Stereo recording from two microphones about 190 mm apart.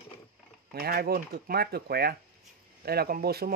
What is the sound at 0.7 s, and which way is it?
Speech, 55° right (ahead or behind).